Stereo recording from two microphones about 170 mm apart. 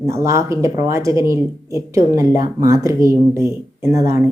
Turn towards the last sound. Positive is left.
turn(degrees=-15)  # may be behind; listen again after turning